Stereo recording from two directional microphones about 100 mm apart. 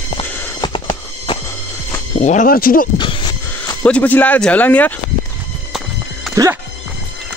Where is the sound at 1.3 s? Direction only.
55° left (ahead or behind).